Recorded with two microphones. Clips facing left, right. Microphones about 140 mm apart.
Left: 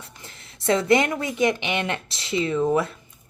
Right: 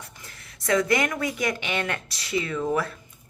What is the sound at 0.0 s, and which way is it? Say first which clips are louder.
A woman's voice: left 1 dB; 25° left (ahead or behind).